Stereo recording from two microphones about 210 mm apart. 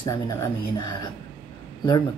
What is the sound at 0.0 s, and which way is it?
Speech, 15° left (ahead or behind).